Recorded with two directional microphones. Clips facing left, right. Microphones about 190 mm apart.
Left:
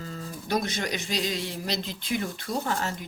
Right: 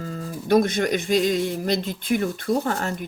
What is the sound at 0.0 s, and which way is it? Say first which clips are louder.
Speech: right 6 dB; 45° right (ahead or behind).